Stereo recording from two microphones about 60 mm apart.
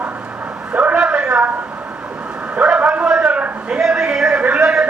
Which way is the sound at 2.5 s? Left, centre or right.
Centre.